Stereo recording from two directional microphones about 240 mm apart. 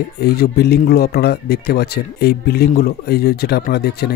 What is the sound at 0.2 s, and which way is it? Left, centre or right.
Speech, left.